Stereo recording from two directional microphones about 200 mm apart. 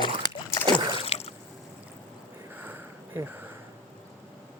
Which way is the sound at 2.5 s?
10° right (ahead or behind).